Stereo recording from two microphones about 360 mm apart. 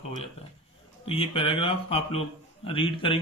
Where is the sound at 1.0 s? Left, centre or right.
Centre.